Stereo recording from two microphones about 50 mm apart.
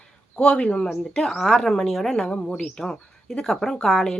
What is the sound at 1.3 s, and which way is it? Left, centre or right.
Speech, centre.